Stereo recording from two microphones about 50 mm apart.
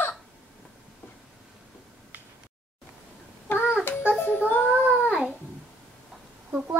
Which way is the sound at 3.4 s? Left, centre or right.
Left.